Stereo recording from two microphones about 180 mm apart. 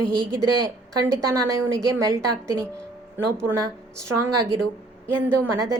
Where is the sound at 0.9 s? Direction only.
15° right (ahead or behind).